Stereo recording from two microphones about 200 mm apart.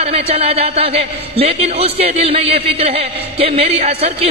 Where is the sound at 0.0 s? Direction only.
30° right (ahead or behind).